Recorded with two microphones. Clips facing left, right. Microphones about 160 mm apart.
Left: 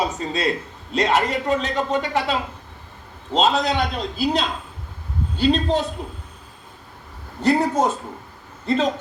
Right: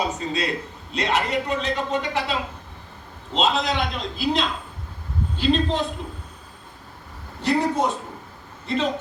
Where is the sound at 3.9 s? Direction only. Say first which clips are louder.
Left 2 dB; 40° left (ahead or behind).